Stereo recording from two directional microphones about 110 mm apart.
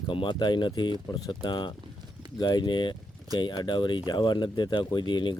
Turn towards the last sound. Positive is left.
turn(degrees=45)  # may be behind; listen again after turning